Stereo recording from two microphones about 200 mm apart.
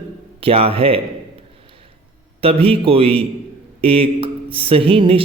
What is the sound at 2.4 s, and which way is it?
A man's voice, 30° right (ahead or behind).